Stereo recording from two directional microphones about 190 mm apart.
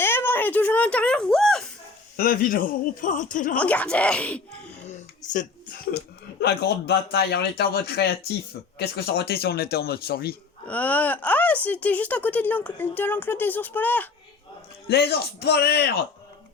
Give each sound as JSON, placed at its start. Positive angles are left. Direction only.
{"t": 0.0, "sound": "a sound", "side_deg": 10}
{"t": 2.1, "sound": "speech", "side_deg": 50}
{"t": 3.6, "sound": "speech", "side_deg": 5}
{"t": 4.9, "sound": "a sound", "side_deg": 40}
{"t": 6.4, "sound": "a man's voice", "side_deg": 60}
{"t": 10.7, "sound": "speech", "side_deg": 10}
{"t": 14.8, "sound": "a man's voice", "side_deg": 60}